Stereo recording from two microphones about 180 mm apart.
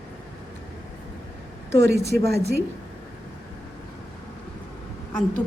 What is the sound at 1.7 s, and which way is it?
Speech, 65° right (ahead or behind).